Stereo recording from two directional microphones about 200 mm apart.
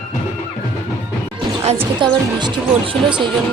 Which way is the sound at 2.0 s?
25° right (ahead or behind).